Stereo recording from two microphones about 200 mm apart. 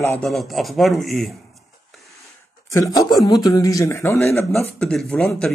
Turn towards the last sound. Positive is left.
turn(degrees=0)  # may be behind; listen again after turning